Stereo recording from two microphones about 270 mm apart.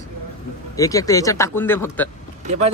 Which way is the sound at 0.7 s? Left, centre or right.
Centre.